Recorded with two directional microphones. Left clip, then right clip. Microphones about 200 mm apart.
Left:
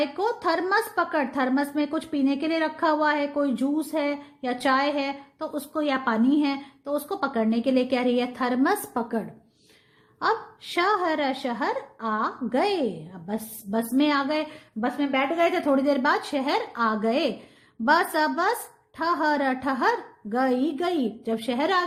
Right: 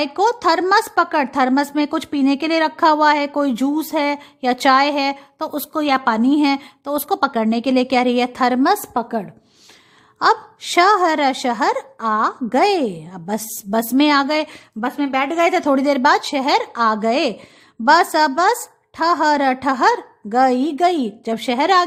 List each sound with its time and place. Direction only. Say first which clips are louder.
0.0 s a woman's voice: right 9 dB; 30° right (ahead or behind)
15.1 s a woman's voice: right 7 dB; 40° right (ahead or behind)